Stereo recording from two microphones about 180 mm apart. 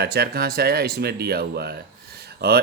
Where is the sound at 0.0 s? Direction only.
60° right (ahead or behind).